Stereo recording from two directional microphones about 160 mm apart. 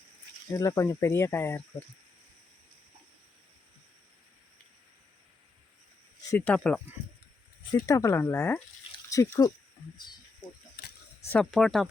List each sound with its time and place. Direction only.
0.5 s speech: 20° left (ahead or behind)
6.3 s speech: 10° left (ahead or behind)
7.9 s speech: 20° left (ahead or behind)
11.3 s speech: 5° left (ahead or behind)